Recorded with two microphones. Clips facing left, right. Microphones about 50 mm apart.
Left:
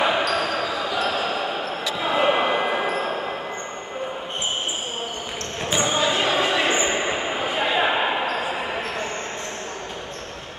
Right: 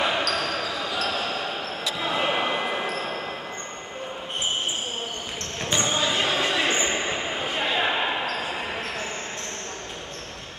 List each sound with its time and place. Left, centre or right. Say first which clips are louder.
0.0 s basketball bounce: left 4 dB; centre
5.7 s basketball bounce: left 3 dB; centre